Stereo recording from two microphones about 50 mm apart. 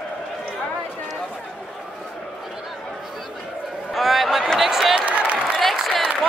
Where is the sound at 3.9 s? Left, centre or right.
Centre.